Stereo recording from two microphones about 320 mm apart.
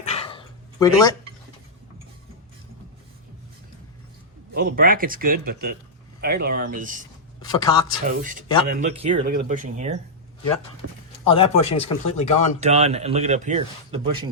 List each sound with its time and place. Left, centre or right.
0.0 s a sound: centre
4.5 s speech: right
7.4 s speech: centre
8.0 s speech: right
11.3 s speech: centre
12.5 s speech: centre